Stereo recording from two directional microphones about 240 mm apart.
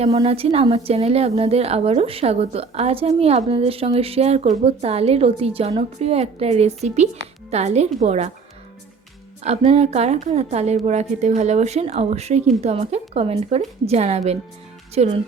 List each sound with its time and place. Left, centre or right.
0.0 s a woman's voice: right
9.4 s a woman's voice: right